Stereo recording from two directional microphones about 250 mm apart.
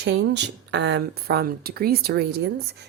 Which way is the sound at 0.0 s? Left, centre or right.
Right.